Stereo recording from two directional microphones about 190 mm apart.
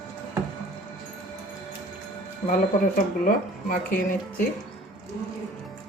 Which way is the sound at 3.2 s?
50° left (ahead or behind).